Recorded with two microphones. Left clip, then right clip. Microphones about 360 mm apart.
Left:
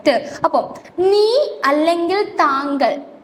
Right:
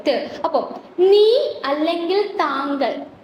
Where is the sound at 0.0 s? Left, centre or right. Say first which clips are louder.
Left 4 dB; left.